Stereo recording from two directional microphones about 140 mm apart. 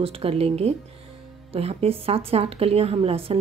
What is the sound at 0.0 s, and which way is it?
A woman's voice, 45° right (ahead or behind).